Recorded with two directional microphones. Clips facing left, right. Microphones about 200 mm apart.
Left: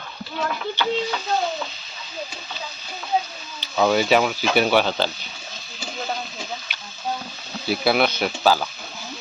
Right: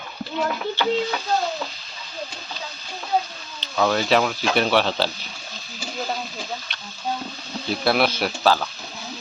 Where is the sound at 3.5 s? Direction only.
5° left (ahead or behind).